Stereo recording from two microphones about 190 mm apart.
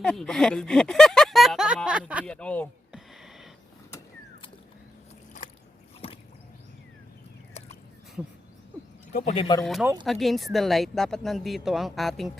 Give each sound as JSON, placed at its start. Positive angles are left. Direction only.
{"t": 0.0, "sound": "speech", "side_deg": 5}
{"t": 2.2, "sound": "a sound", "side_deg": 5}
{"t": 9.2, "sound": "speech", "side_deg": 30}
{"t": 9.8, "sound": "speech", "side_deg": -15}
{"t": 10.1, "sound": "speech", "side_deg": 0}